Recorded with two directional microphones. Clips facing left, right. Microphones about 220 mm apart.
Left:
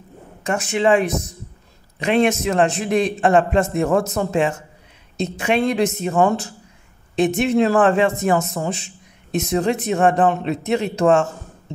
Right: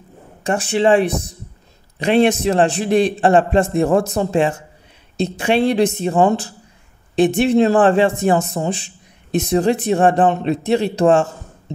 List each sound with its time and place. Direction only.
0.4 s speech: 30° right (ahead or behind)